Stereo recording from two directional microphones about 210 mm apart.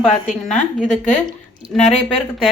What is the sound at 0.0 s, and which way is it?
Speech, 5° left (ahead or behind).